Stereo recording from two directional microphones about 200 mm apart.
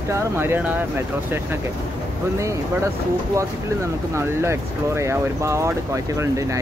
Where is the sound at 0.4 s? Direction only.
10° right (ahead or behind).